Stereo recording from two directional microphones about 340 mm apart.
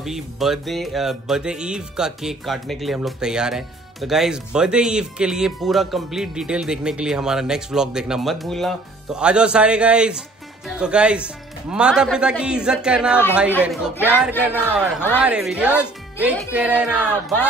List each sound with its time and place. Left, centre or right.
0.0 s speech: centre